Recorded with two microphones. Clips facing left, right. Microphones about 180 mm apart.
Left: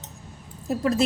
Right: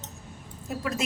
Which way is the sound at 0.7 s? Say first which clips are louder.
Left 8 dB; 35° left (ahead or behind).